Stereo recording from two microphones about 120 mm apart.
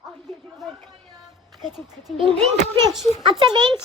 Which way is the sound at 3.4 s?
40° right (ahead or behind).